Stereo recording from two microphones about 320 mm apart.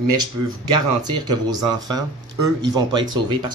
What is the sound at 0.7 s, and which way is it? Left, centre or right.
Speech, centre.